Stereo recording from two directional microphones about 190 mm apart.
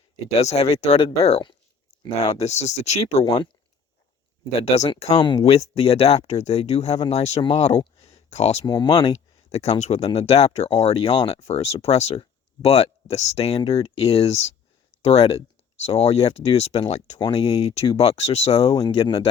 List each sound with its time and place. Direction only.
0.3 s speech: 35° left (ahead or behind)
3.2 s speech: 25° left (ahead or behind)
5.1 s speech: 20° left (ahead or behind)
5.4 s speech: 35° left (ahead or behind)
8.6 s speech: 20° left (ahead or behind)
9.5 s speech: 35° left (ahead or behind)
18.7 s speech: 20° left (ahead or behind)